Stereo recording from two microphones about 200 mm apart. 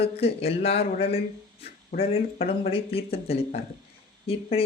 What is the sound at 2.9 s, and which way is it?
Speech, 30° left (ahead or behind).